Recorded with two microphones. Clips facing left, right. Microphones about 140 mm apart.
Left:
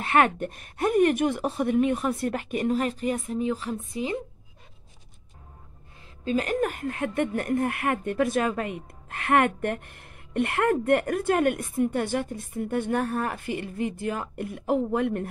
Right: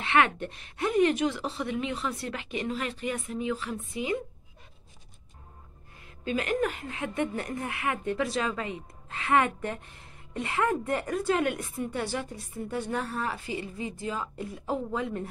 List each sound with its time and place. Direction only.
0.0 s speech: 45° left (ahead or behind)
6.2 s speech: 40° left (ahead or behind); by 15.2 s 60° left (ahead or behind)